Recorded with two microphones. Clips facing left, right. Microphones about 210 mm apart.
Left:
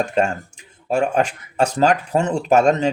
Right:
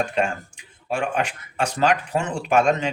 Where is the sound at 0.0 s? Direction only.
40° left (ahead or behind).